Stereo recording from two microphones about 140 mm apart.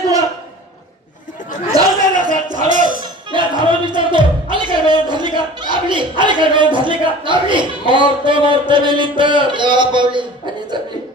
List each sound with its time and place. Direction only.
1.7 s chatter: 25° right (ahead or behind)
2.5 s music: 65° right (ahead or behind)
3.0 s music: 35° right (ahead or behind)
8.2 s a sound: 35° right (ahead or behind)